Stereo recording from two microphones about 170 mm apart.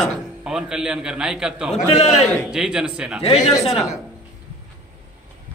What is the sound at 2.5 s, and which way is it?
Speech, 5° right (ahead or behind).